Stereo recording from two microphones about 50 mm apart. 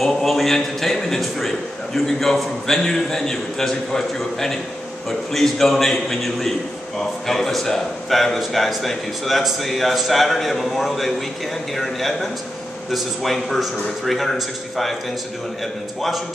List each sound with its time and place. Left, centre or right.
0.0 s a man's voice: centre